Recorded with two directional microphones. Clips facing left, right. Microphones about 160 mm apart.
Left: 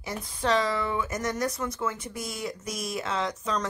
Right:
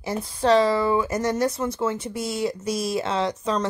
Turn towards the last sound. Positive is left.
turn(degrees=-30)  # may be behind; listen again after turning